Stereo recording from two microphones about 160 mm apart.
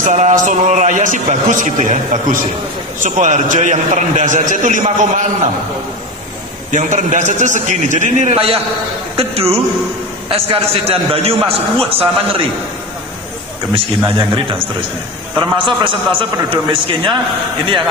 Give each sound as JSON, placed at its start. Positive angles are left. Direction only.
{"t": 0.0, "sound": "a man's voice", "side_deg": -50}
{"t": 6.7, "sound": "a man's voice", "side_deg": -50}
{"t": 14.0, "sound": "a man's voice", "side_deg": -25}